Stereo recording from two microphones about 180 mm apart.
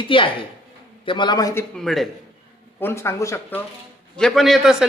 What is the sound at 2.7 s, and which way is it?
Speech, 10° left (ahead or behind).